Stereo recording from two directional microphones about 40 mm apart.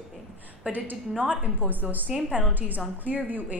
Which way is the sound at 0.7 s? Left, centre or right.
Right.